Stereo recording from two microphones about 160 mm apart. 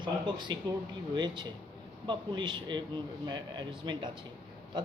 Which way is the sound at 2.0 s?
30° right (ahead or behind).